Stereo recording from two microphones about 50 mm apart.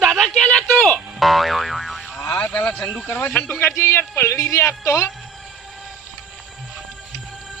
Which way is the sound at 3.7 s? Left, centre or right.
Left.